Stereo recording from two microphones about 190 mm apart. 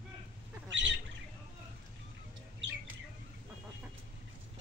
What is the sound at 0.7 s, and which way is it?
Bird, 75° right (ahead or behind).